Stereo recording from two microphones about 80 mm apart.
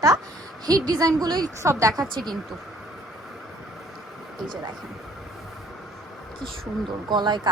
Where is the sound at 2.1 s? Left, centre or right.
Right.